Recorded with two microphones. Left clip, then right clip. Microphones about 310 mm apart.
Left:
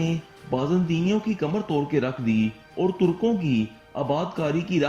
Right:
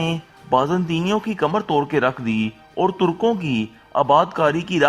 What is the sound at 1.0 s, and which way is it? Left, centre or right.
A man's voice, right.